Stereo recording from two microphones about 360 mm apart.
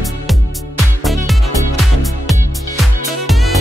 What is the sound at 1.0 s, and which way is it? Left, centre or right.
Music, centre.